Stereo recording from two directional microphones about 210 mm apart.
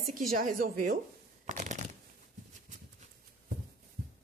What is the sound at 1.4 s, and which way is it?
Shuffling cards, 35° right (ahead or behind).